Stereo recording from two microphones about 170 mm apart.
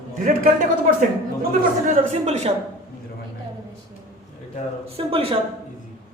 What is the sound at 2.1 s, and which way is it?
Speech, 40° right (ahead or behind).